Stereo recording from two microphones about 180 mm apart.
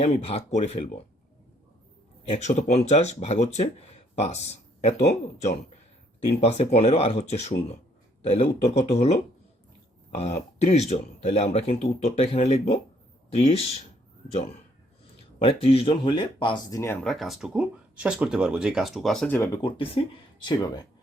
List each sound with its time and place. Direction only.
0.0 s speech: 35° left (ahead or behind)
2.3 s speech: 40° left (ahead or behind)
10.2 s speech: 35° left (ahead or behind)
15.4 s speech: 30° left (ahead or behind)
17.0 s speech: centre (ahead or behind)
19.6 s speech: 25° left (ahead or behind)